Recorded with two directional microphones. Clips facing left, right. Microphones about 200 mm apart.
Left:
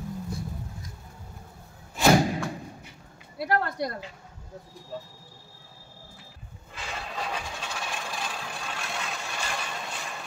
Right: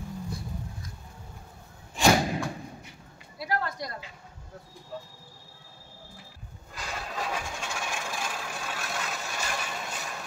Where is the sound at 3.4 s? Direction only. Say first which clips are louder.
Left 5 dB; 60° left (ahead or behind).